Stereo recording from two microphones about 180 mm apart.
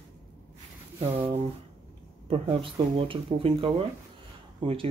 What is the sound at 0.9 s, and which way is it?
Speech, 35° right (ahead or behind).